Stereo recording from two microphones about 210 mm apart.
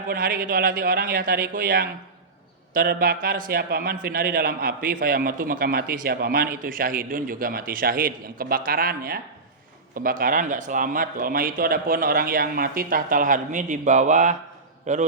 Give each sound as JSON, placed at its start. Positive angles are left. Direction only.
{"t": 0.1, "sound": "a man's voice", "side_deg": -45}